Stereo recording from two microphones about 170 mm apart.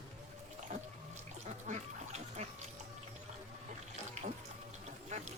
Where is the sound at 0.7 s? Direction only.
45° right (ahead or behind).